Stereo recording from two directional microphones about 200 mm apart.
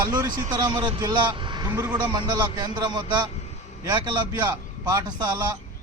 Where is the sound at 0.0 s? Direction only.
20° right (ahead or behind).